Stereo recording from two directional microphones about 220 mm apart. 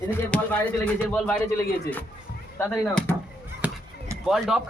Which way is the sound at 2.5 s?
10° left (ahead or behind).